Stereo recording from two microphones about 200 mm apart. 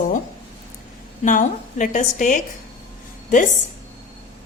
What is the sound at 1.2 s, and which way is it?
A woman's voice, 40° left (ahead or behind).